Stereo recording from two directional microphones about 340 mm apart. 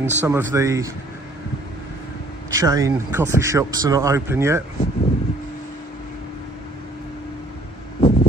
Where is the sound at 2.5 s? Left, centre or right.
Centre.